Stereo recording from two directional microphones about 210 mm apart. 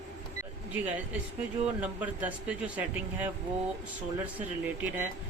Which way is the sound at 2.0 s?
5° right (ahead or behind).